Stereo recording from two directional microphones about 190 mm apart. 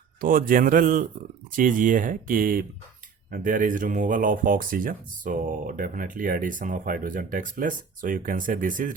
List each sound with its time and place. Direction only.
0.2 s speech: 45° right (ahead or behind)